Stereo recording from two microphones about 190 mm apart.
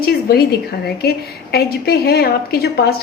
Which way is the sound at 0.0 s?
55° left (ahead or behind).